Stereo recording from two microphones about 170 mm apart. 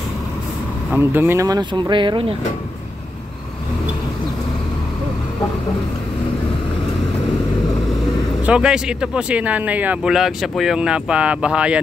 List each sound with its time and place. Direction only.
0.9 s speech: 15° right (ahead or behind); by 2.3 s 30° right (ahead or behind)
8.5 s speech: 5° right (ahead or behind)